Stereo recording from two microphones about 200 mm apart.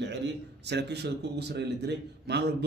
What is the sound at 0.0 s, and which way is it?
A man's voice, 60° right (ahead or behind).